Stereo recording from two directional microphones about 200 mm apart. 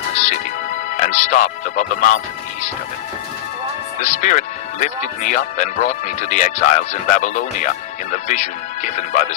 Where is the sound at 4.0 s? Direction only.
35° left (ahead or behind).